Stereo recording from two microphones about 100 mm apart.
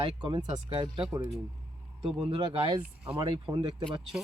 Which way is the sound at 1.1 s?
35° right (ahead or behind).